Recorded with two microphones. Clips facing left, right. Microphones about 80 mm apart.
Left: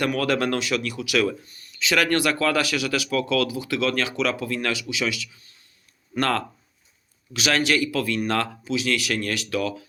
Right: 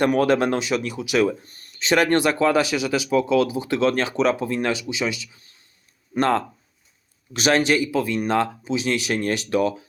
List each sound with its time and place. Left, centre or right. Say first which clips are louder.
0.0 s speech: right 5 dB; right
1.5 s speech: right 4 dB; right
7.3 s speech: right 3 dB; right